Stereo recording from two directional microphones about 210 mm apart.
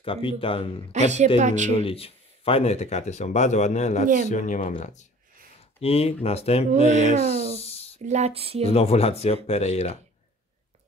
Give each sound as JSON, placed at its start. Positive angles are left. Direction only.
{"t": 0.0, "sound": "speech", "side_deg": 25}
{"t": 0.9, "sound": "a woman's voice", "side_deg": -35}
{"t": 1.7, "sound": "speech", "side_deg": 25}
{"t": 5.8, "sound": "speech", "side_deg": 30}
{"t": 6.9, "sound": "a woman's voice", "side_deg": -35}
{"t": 7.5, "sound": "a sound", "side_deg": 30}
{"t": 8.0, "sound": "a sound", "side_deg": -30}
{"t": 8.7, "sound": "speech", "side_deg": 30}